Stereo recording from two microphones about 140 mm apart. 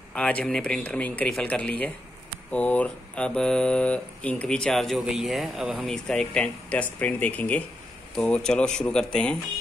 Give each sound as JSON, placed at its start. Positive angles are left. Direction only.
{"t": 0.1, "sound": "speech", "side_deg": 10}
{"t": 5.9, "sound": "speech", "side_deg": 10}